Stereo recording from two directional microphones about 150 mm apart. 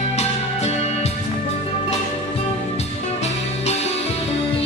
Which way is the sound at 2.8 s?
45° left (ahead or behind).